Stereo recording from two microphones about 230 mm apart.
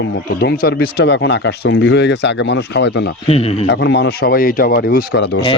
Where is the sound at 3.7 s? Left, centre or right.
Left.